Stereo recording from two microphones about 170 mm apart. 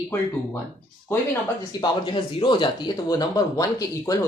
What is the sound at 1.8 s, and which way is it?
Speech, 30° left (ahead or behind).